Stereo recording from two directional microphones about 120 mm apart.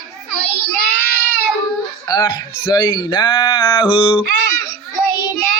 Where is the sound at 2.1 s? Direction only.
35° left (ahead or behind).